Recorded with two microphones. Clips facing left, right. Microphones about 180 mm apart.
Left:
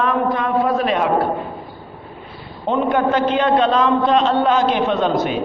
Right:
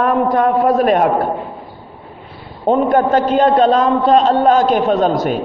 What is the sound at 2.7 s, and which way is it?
A man's voice, 45° right (ahead or behind).